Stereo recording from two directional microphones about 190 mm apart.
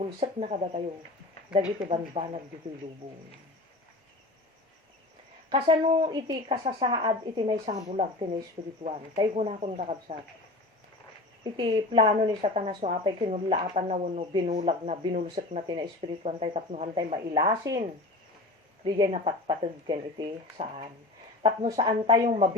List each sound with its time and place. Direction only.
0.2 s speech: 35° right (ahead or behind)
5.5 s speech: 25° right (ahead or behind)
11.5 s speech: 25° right (ahead or behind)
18.9 s speech: 25° right (ahead or behind)